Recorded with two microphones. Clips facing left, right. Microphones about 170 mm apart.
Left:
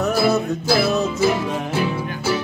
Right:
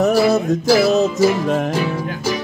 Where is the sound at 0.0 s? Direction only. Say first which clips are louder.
Right 4 dB; 35° right (ahead or behind).